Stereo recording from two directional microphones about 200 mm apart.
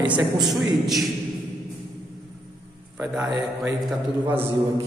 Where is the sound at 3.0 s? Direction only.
5° right (ahead or behind).